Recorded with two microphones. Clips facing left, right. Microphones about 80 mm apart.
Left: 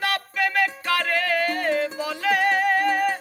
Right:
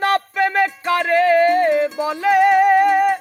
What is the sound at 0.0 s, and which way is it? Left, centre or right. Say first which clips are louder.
Music: right 7 dB; right.